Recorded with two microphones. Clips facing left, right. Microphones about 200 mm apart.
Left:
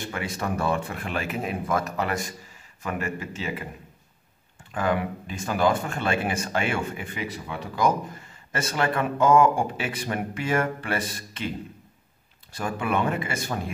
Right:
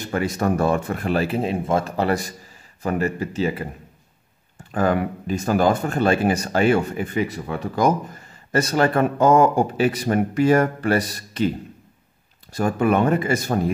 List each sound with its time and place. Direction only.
0.0 s speech: 40° right (ahead or behind)
4.7 s speech: 40° right (ahead or behind)
12.5 s speech: 40° right (ahead or behind)